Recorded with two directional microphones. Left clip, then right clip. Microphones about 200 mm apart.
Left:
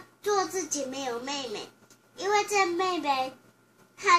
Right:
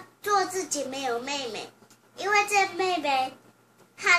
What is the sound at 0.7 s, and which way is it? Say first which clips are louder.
A child's voice: right 3 dB; 20° right (ahead or behind).